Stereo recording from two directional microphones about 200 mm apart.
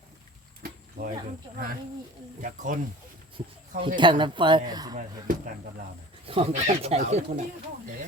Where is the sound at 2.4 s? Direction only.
40° right (ahead or behind).